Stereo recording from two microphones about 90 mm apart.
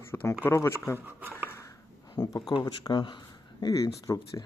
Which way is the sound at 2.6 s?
55° left (ahead or behind).